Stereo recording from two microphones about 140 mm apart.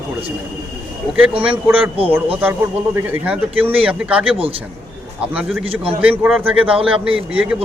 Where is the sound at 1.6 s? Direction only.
10° right (ahead or behind).